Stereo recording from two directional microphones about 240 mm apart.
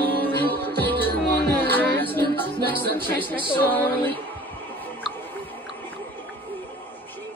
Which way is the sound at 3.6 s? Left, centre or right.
Centre.